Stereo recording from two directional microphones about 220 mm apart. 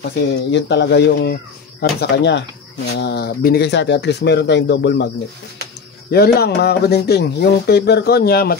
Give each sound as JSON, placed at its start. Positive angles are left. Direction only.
{"t": 0.5, "sound": "speech", "side_deg": 50}
{"t": 6.0, "sound": "speech", "side_deg": 45}